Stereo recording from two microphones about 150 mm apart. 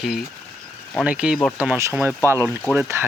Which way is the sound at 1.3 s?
15° left (ahead or behind).